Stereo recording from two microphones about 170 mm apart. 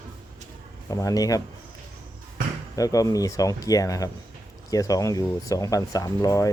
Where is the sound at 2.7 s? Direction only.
20° left (ahead or behind).